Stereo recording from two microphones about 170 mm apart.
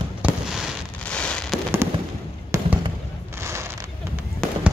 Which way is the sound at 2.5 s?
15° right (ahead or behind).